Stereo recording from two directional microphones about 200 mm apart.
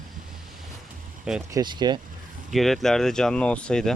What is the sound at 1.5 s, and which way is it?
Speech, 20° right (ahead or behind).